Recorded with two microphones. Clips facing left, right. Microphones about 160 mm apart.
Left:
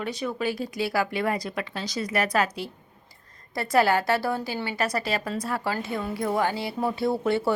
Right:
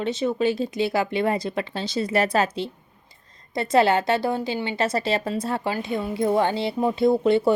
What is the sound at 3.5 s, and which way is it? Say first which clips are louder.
A woman's voice: right 3 dB; 20° right (ahead or behind).